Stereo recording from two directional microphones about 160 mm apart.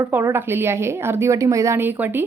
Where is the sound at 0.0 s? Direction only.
15° right (ahead or behind).